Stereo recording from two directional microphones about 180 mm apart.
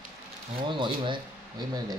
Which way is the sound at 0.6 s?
25° right (ahead or behind).